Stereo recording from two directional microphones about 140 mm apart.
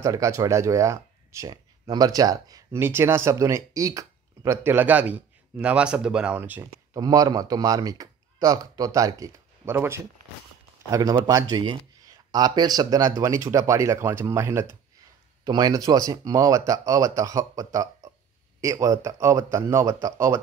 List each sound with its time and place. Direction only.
0.0 s speech: 25° right (ahead or behind)
6.9 s speech: 25° right (ahead or behind)